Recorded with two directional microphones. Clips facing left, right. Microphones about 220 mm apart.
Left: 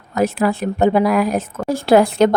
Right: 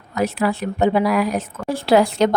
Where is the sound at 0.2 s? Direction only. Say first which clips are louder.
Left 3 dB; 45° left (ahead or behind).